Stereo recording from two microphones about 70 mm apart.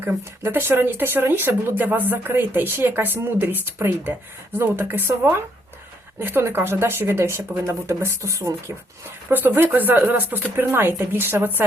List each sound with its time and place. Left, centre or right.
0.0 s speech: right
9.3 s speech: right